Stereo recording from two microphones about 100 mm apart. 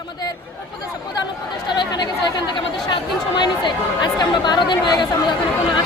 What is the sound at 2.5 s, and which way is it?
Speech, 50° left (ahead or behind).